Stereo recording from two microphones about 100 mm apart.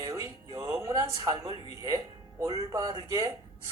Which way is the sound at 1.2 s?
40° right (ahead or behind).